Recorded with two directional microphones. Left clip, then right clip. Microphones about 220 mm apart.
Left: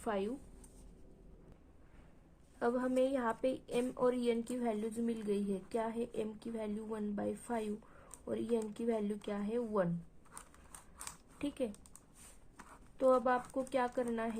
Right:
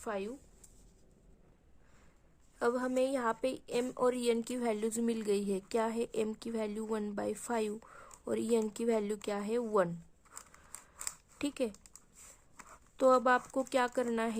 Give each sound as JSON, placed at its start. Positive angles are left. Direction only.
{"t": 0.0, "sound": "a woman's voice", "side_deg": -20}
{"t": 2.6, "sound": "a woman's voice", "side_deg": -35}
{"t": 11.3, "sound": "speech", "side_deg": -40}
{"t": 13.0, "sound": "a woman's voice", "side_deg": -40}